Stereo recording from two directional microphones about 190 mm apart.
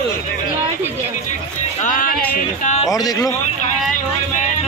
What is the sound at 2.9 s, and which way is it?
Speech, 20° left (ahead or behind).